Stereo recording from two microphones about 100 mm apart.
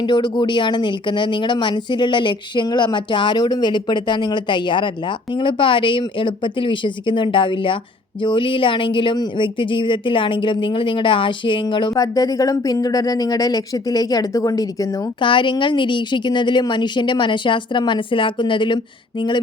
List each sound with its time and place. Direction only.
0.0 s speech: 50° left (ahead or behind)
15.2 s speech: 55° left (ahead or behind)